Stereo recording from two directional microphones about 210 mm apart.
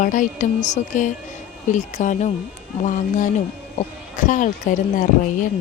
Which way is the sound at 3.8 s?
35° left (ahead or behind).